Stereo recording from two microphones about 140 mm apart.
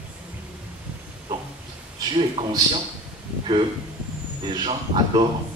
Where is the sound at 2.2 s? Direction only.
40° right (ahead or behind).